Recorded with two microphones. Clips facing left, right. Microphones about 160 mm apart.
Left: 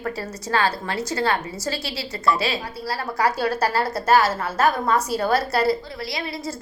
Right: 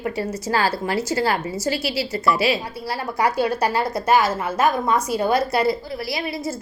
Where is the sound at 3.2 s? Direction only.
15° right (ahead or behind).